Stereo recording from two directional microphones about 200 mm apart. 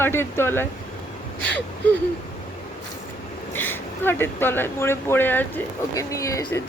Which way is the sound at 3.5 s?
10° left (ahead or behind).